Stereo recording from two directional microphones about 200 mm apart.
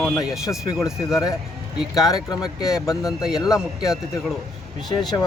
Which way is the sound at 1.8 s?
Centre (ahead or behind).